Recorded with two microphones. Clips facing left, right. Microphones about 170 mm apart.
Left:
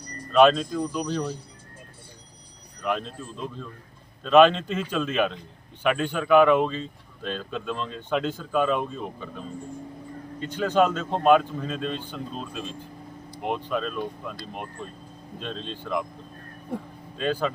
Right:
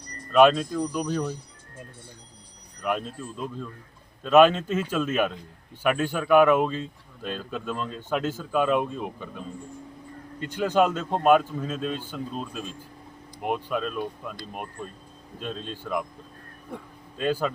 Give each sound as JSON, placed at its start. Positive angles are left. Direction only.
{"t": 0.3, "sound": "speech", "side_deg": -10}
{"t": 2.8, "sound": "speech", "side_deg": -10}
{"t": 10.5, "sound": "speech", "side_deg": -10}
{"t": 17.2, "sound": "speech", "side_deg": -10}